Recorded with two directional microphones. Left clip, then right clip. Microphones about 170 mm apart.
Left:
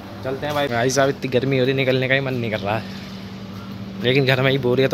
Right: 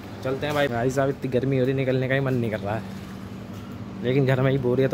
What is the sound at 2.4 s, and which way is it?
Speech, centre (ahead or behind).